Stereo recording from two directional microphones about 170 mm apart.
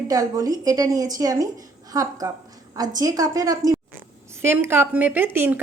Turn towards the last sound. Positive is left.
turn(degrees=-10)  # may be behind; listen again after turning